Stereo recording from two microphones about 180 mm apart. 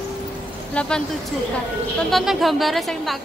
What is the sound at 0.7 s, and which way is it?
Speech, 5° left (ahead or behind).